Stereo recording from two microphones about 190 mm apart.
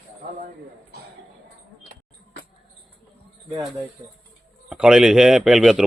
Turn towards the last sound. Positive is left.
turn(degrees=0)  # may be behind; listen again after turning